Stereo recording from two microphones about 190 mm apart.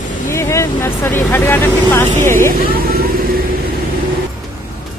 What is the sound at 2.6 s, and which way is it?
Vehicle, 50° right (ahead or behind).